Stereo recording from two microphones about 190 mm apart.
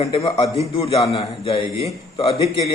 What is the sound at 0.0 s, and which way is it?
A man's voice, 30° left (ahead or behind).